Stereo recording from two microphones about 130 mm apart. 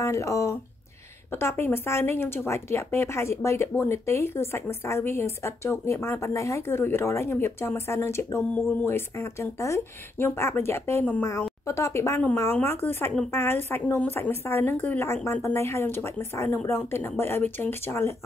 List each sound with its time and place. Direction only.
0.0 s a woman's voice: 25° left (ahead or behind)